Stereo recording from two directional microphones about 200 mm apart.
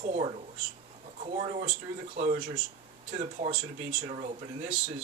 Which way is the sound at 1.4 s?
35° right (ahead or behind).